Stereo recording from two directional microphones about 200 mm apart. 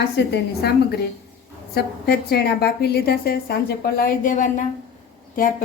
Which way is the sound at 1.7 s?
50° left (ahead or behind).